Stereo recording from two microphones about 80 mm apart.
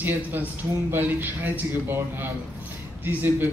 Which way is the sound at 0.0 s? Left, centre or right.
Right.